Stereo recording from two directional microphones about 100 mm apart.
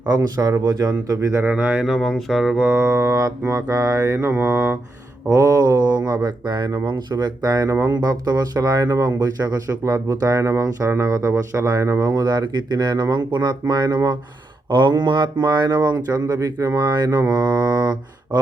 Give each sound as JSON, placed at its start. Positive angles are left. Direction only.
{"t": 0.1, "sound": "speech", "side_deg": -35}
{"t": 1.5, "sound": "speech", "side_deg": -15}
{"t": 1.8, "sound": "speech", "side_deg": 0}
{"t": 2.6, "sound": "mantra", "side_deg": -20}
{"t": 5.3, "sound": "speech", "side_deg": -35}